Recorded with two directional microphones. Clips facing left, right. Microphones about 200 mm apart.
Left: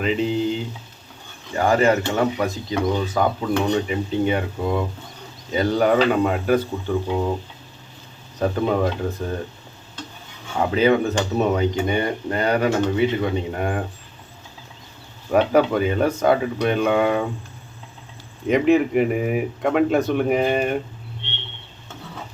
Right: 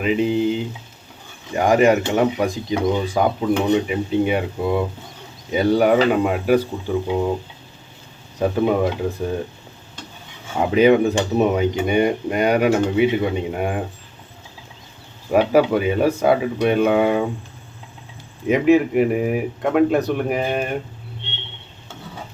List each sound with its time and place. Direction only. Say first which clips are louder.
0.0 s speech: right 3 dB; 5° right (ahead or behind)
0.3 s speech: right 3 dB; 55° right (ahead or behind)
1.5 s speech: right 3 dB; 15° right (ahead or behind)
6.1 s speech: right 1 dB; centre (ahead or behind)
6.4 s speech: right 2 dB; 10° right (ahead or behind)
8.4 s speech: right 2 dB; 10° right (ahead or behind)
10.6 s speech: right 4 dB; 15° right (ahead or behind)
15.3 s speech: right 2 dB; 5° right (ahead or behind)
18.4 s speech: right 2 dB; 5° right (ahead or behind)